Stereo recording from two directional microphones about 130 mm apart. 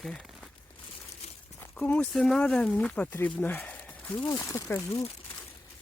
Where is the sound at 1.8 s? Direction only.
10° left (ahead or behind).